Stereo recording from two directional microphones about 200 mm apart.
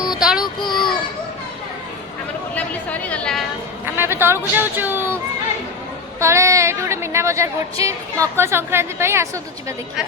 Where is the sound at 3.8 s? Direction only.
10° right (ahead or behind).